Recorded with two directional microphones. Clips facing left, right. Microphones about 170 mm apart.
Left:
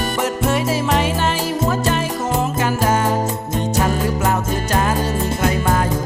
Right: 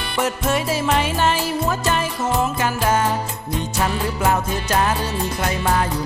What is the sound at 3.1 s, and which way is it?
Music, 45° left (ahead or behind).